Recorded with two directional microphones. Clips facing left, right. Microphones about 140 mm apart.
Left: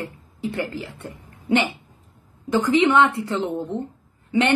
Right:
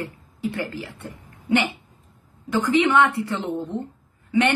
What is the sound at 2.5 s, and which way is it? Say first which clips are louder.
Speech: left 1 dB; 20° left (ahead or behind).